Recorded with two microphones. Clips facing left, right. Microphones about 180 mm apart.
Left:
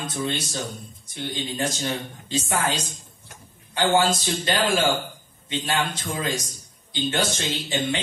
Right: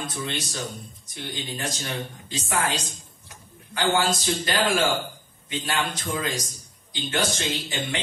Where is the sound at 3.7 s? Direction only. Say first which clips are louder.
Left 3 dB; 25° left (ahead or behind).